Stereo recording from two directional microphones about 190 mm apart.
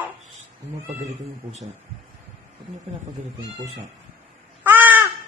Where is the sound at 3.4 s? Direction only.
35° right (ahead or behind).